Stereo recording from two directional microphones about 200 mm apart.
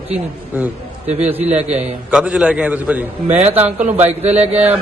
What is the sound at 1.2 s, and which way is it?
A man's voice, 10° right (ahead or behind).